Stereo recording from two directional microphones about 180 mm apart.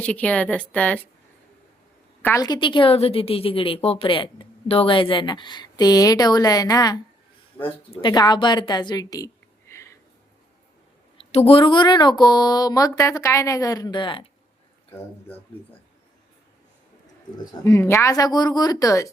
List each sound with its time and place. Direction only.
0.0 s a woman's voice: 5° left (ahead or behind)
2.2 s speech: 20° left (ahead or behind)
8.0 s a woman's voice: 25° left (ahead or behind)
11.2 s speech: 35° left (ahead or behind)
17.3 s speech: 15° left (ahead or behind)